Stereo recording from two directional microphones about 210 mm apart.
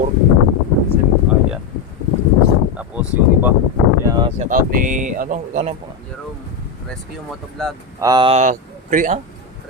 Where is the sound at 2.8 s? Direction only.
10° right (ahead or behind).